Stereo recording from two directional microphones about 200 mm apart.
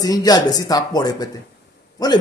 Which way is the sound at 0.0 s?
20° left (ahead or behind).